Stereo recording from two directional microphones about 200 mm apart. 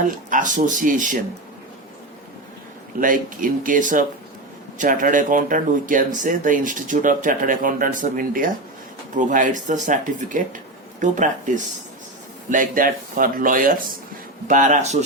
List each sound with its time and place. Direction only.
0.0 s speech: 40° right (ahead or behind)
3.0 s speech: 40° right (ahead or behind)